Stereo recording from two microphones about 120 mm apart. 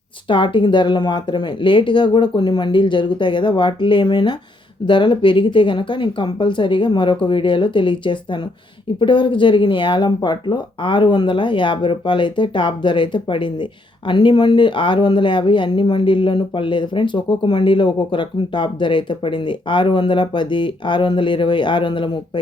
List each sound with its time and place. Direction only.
0.3 s speech: 40° left (ahead or behind)